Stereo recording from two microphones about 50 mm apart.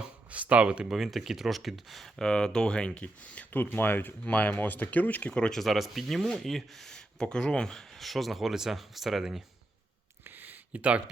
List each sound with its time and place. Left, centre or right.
0.3 s a sound: right
0.9 s speech: centre
2.2 s speech: centre; by 4.1 s left
4.3 s speech: left
5.3 s speech: centre
5.5 s speech: centre
10.2 s a sound: right
10.7 s speech: right